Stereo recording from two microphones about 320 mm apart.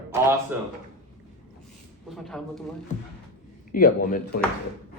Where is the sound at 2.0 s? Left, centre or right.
Centre.